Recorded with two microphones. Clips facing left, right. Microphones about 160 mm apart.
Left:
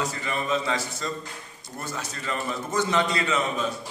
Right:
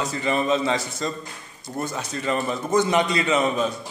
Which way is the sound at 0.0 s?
25° right (ahead or behind).